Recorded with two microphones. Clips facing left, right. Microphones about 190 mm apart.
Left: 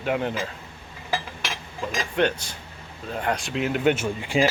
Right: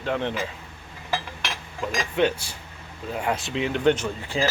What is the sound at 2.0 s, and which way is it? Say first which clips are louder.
Speech: right 1 dB; 5° right (ahead or behind).